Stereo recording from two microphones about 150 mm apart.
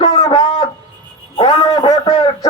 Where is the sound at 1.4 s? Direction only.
30° left (ahead or behind).